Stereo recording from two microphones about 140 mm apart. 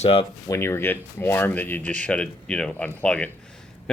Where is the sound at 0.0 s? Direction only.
40° left (ahead or behind).